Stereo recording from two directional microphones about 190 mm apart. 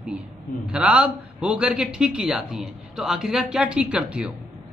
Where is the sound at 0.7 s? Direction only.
5° right (ahead or behind).